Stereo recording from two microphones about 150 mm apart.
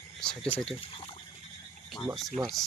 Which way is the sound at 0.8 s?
40° left (ahead or behind).